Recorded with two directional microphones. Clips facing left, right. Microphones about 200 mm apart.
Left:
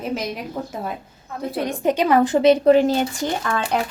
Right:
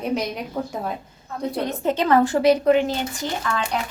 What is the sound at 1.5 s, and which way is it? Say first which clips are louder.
A woman's voice: left 3 dB; 15° left (ahead or behind).